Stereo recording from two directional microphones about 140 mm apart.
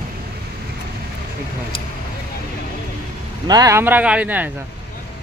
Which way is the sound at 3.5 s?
25° right (ahead or behind).